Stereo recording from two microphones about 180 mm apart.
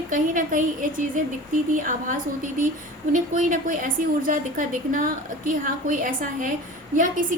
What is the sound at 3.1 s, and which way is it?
A woman's voice, 45° right (ahead or behind).